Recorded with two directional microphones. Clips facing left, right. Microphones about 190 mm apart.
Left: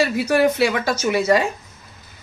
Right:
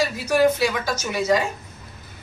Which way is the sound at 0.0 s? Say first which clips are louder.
Left 2 dB; 60° left (ahead or behind).